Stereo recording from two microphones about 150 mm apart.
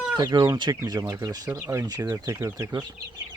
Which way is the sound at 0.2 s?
25° right (ahead or behind).